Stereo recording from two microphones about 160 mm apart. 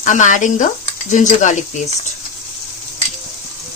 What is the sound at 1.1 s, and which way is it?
Speech, 50° left (ahead or behind).